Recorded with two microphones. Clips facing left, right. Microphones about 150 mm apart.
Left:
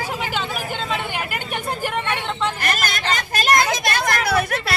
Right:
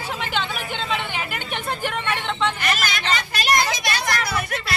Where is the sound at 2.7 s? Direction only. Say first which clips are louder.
Left 1 dB; 50° left (ahead or behind).